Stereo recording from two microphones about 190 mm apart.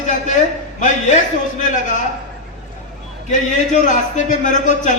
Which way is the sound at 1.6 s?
40° left (ahead or behind).